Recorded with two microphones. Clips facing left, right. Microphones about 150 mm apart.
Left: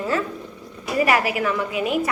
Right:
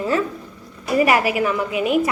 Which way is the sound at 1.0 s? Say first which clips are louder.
Right 1 dB; 15° right (ahead or behind).